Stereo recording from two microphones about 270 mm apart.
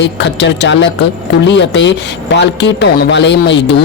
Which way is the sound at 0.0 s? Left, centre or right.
Left.